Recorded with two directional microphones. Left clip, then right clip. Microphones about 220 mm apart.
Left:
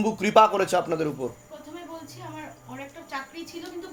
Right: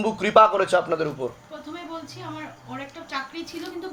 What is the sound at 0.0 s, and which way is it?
A man's voice, 35° left (ahead or behind).